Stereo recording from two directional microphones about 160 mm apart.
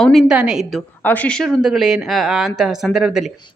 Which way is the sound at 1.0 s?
10° left (ahead or behind).